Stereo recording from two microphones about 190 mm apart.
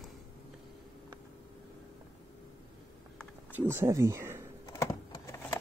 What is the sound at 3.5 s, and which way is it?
Speech, 10° right (ahead or behind).